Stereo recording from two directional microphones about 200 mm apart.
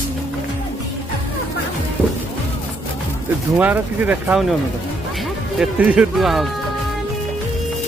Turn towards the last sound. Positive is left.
turn(degrees=0)  # may be behind; listen again after turning